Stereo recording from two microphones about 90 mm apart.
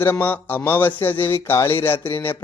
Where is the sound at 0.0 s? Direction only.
25° left (ahead or behind).